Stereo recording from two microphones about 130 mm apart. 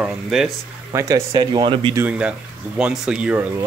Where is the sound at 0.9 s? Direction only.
25° right (ahead or behind).